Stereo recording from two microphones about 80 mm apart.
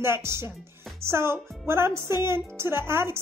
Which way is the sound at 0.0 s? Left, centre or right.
Right.